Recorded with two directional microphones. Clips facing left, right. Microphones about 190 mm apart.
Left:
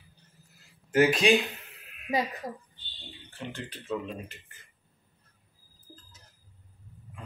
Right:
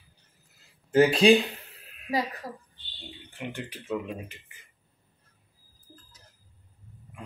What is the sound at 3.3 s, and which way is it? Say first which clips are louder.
Speech: right 2 dB; 15° right (ahead or behind).